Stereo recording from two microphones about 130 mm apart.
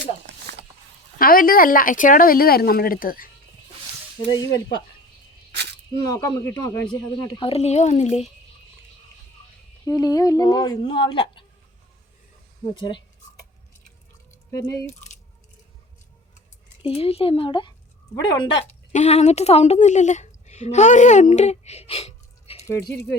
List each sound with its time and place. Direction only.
1.2 s speech: 90° left
4.3 s speech: 30° left (ahead or behind)
5.9 s speech: 30° left (ahead or behind)
7.3 s speech: 45° left (ahead or behind)
9.8 s speech: 30° left (ahead or behind)
12.7 s speech: 40° left (ahead or behind)
14.3 s drip: 25° left (ahead or behind)
16.8 s speech: 50° left (ahead or behind)
18.9 s a woman's voice: 55° left (ahead or behind)
22.6 s speech: 20° left (ahead or behind)